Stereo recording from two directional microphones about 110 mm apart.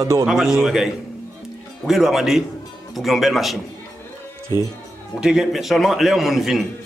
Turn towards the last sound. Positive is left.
turn(degrees=-5)  # may be behind; listen again after turning